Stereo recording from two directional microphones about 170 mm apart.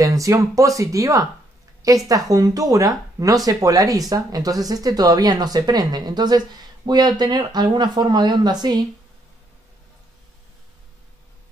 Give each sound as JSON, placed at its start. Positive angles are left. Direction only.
{"t": 0.0, "sound": "speech", "side_deg": -20}